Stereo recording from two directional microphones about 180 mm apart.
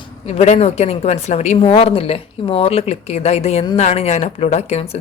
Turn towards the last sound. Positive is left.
turn(degrees=35)  # may be behind; listen again after turning